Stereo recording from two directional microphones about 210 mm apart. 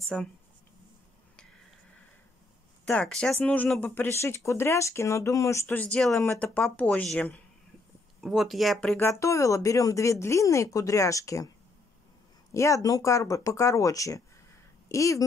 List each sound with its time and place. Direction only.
0.1 s speech: 5° left (ahead or behind)
2.8 s speech: 5° left (ahead or behind)
12.5 s speech: 15° left (ahead or behind)